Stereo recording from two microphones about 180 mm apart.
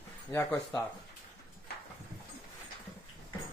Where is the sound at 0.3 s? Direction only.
10° left (ahead or behind).